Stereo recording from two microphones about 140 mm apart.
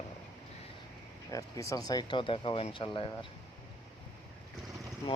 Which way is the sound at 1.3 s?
25° left (ahead or behind).